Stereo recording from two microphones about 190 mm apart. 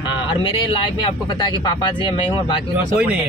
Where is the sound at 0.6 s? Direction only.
25° left (ahead or behind).